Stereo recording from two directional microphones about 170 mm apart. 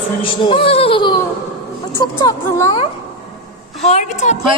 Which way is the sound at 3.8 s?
40° left (ahead or behind).